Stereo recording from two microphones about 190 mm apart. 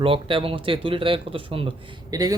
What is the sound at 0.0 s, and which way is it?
Speech, 25° right (ahead or behind).